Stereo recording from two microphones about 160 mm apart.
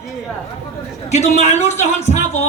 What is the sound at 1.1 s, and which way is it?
Speech, 45° left (ahead or behind).